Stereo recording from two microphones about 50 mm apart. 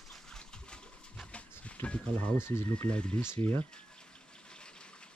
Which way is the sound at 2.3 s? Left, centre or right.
Left.